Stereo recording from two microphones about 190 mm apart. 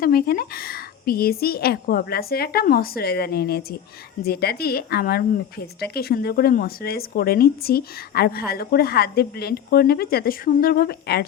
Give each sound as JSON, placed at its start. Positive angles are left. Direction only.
{"t": 0.0, "sound": "speech", "side_deg": 50}